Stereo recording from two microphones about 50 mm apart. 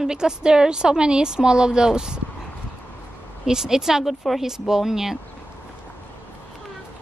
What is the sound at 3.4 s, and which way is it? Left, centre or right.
A woman's voice, centre.